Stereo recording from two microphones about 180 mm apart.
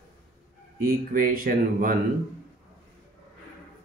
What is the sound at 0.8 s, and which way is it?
Speech, 50° right (ahead or behind).